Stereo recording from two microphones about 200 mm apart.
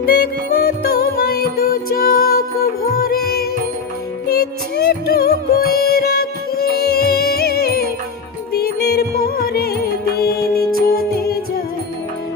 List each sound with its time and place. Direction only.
0.0 s music: 50° left (ahead or behind)